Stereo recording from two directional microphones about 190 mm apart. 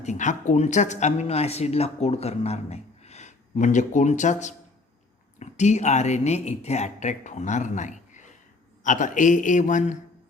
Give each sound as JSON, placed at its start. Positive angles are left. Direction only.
{"t": 0.0, "sound": "speech", "side_deg": 40}